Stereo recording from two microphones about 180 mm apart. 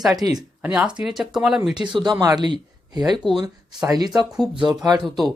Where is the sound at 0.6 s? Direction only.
5° right (ahead or behind).